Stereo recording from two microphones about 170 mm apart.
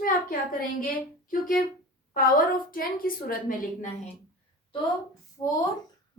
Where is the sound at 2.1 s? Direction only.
55° left (ahead or behind).